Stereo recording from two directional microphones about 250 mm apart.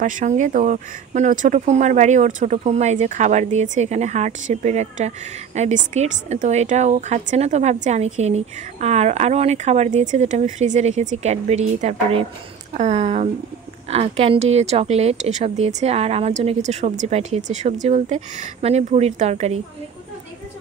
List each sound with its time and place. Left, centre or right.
0.0 s speech: right